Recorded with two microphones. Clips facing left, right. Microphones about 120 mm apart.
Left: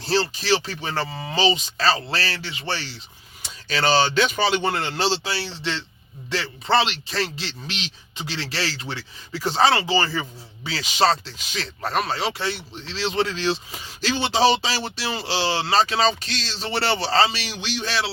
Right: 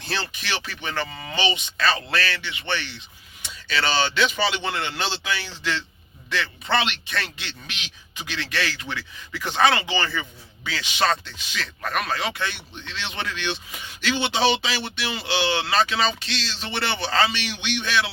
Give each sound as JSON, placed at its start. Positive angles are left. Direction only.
{"t": 0.0, "sound": "a man's voice", "side_deg": 30}